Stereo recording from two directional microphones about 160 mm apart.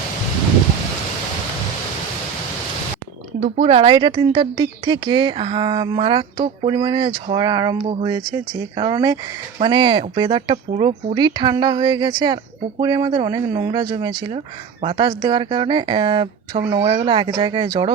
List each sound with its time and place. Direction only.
3.4 s a woman's voice: 35° right (ahead or behind)